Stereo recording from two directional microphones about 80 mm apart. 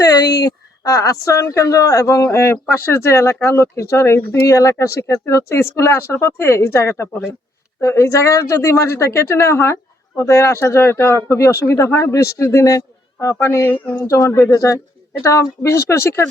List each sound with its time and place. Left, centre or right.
0.0 s a woman's voice: left